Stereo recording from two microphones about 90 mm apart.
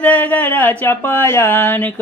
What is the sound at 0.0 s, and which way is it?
Speech, 20° left (ahead or behind).